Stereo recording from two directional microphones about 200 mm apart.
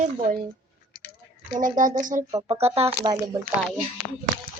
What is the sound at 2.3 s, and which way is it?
Speech, 25° right (ahead or behind).